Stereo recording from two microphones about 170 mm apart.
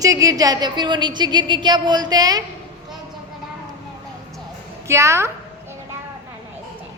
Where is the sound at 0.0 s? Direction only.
20° right (ahead or behind).